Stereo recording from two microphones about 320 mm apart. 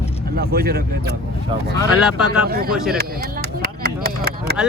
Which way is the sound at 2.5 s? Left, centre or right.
Right.